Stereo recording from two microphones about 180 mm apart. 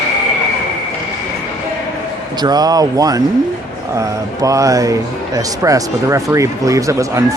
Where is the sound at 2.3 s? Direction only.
20° right (ahead or behind).